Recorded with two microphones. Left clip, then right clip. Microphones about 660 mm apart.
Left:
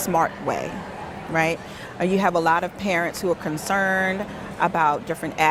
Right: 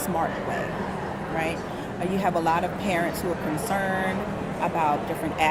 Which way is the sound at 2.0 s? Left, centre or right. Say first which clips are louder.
Left 5 dB; left.